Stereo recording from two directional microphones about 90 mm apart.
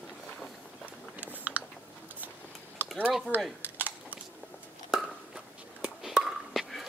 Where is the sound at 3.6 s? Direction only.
20° right (ahead or behind).